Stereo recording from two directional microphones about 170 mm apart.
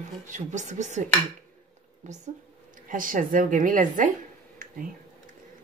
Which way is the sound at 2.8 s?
55° right (ahead or behind).